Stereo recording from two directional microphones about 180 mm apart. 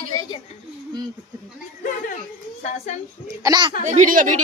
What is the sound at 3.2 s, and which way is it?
Speech, 20° right (ahead or behind).